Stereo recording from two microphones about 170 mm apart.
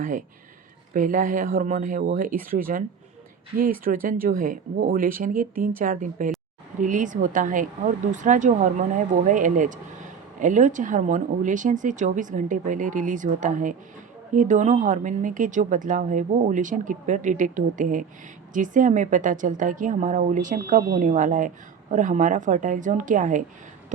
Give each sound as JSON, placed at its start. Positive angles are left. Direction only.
{"t": 0.0, "sound": "a woman's voice", "side_deg": -50}
{"t": 3.8, "sound": "a woman's voice", "side_deg": -55}